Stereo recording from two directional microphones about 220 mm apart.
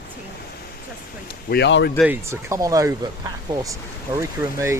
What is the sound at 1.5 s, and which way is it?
Speech, 50° left (ahead or behind).